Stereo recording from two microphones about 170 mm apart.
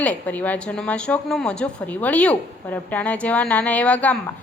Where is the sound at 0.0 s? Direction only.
10° left (ahead or behind).